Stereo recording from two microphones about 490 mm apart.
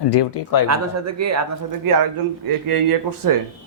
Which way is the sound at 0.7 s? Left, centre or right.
Right.